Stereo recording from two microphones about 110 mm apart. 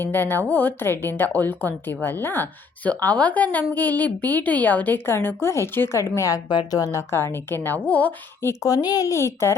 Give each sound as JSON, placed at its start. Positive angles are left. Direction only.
{"t": 0.0, "sound": "a woman's voice", "side_deg": 20}
{"t": 8.4, "sound": "a woman's voice", "side_deg": 35}